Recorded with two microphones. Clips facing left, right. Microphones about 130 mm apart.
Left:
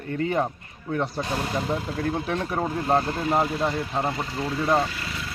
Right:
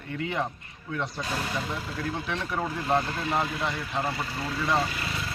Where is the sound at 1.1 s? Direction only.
35° left (ahead or behind).